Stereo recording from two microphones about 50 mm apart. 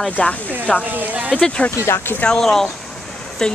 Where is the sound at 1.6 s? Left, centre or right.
Left.